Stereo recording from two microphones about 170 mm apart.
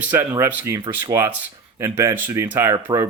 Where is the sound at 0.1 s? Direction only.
10° right (ahead or behind).